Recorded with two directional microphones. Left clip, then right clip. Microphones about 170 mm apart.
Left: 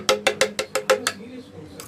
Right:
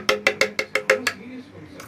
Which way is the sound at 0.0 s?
Centre (ahead or behind).